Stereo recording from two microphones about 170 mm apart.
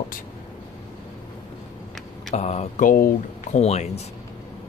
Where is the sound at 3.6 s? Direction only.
40° left (ahead or behind).